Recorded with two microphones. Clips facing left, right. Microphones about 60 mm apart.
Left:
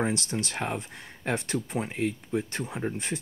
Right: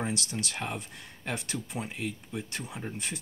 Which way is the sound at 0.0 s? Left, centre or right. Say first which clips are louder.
Left 5 dB; left.